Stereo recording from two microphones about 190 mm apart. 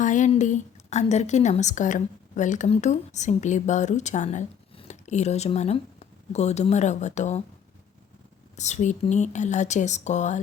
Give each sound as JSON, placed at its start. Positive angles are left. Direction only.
{"t": 0.0, "sound": "a woman's voice", "side_deg": 40}
{"t": 8.5, "sound": "speech", "side_deg": 40}